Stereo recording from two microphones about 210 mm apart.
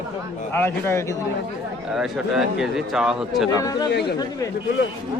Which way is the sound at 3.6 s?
20° left (ahead or behind).